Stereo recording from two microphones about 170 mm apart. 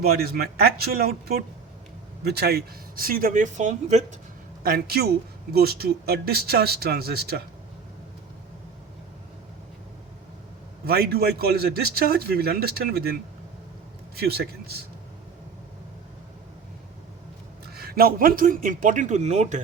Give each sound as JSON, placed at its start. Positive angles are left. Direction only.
{"t": 0.0, "sound": "a man's voice", "side_deg": -65}
{"t": 4.6, "sound": "a man's voice", "side_deg": -65}
{"t": 10.8, "sound": "a man's voice", "side_deg": -65}
{"t": 14.2, "sound": "a man's voice", "side_deg": -65}
{"t": 17.7, "sound": "a man's voice", "side_deg": -60}